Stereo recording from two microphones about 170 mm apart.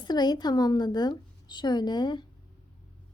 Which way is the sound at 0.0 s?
25° left (ahead or behind).